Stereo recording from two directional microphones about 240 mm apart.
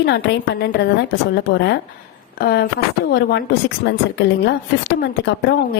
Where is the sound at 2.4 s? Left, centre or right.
Left.